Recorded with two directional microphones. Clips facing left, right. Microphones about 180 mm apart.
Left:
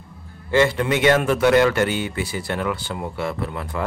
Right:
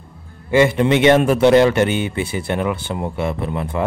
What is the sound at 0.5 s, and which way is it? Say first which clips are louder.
A man's voice: right 4 dB; 20° right (ahead or behind).